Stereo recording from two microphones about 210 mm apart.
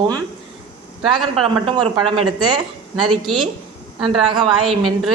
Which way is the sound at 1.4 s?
25° right (ahead or behind).